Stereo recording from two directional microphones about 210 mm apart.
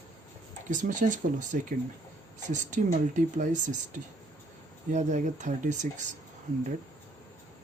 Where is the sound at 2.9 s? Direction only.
35° right (ahead or behind).